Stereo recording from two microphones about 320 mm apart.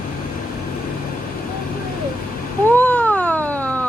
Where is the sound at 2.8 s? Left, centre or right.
Centre.